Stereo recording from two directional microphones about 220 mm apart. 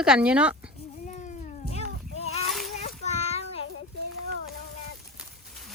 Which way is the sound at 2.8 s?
30° left (ahead or behind).